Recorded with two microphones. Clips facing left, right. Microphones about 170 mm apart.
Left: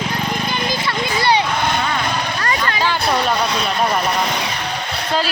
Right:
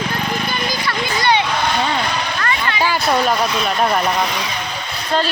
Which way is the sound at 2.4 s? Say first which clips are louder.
Even; 40° left (ahead or behind).